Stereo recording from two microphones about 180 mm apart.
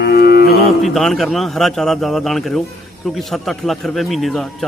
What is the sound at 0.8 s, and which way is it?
Speech, centre (ahead or behind).